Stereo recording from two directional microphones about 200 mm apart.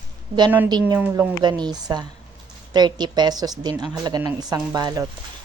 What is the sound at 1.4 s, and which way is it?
Speech, 20° right (ahead or behind).